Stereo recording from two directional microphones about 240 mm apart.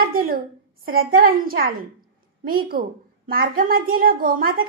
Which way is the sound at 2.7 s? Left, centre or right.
Right.